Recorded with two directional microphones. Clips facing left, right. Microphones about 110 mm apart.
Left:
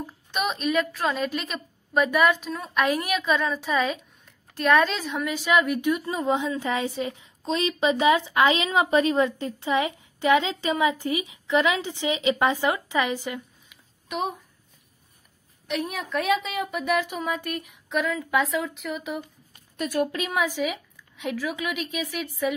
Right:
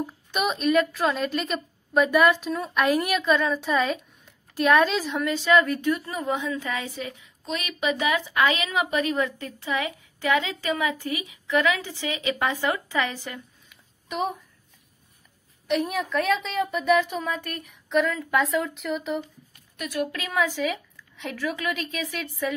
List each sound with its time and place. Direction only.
0.0 s a woman's voice: centre (ahead or behind)
5.3 s a woman's voice: 15° left (ahead or behind)
14.0 s a child's voice: centre (ahead or behind)
15.7 s a woman's voice: centre (ahead or behind)
17.2 s a woman's voice: 15° left (ahead or behind)
19.8 s a woman's voice: 35° left (ahead or behind)
20.1 s a woman's voice: 20° left (ahead or behind)